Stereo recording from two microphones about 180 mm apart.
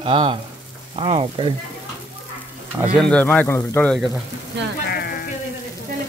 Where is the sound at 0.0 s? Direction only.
30° right (ahead or behind).